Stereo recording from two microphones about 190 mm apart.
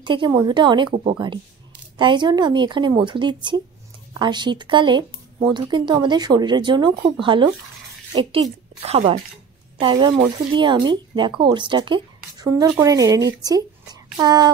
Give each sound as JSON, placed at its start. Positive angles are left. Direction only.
{"t": 0.0, "sound": "speech", "side_deg": -25}